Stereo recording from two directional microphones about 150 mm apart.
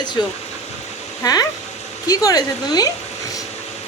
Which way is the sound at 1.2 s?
25° left (ahead or behind).